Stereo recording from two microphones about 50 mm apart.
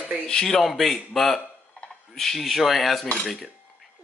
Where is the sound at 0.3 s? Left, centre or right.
Centre.